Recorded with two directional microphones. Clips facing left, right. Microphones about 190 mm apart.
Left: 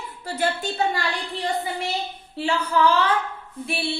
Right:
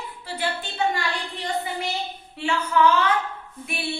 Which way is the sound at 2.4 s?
35° left (ahead or behind).